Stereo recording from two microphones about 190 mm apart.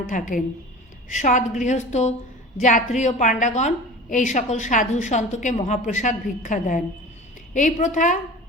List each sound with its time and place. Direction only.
0.1 s a woman's voice: 45° left (ahead or behind)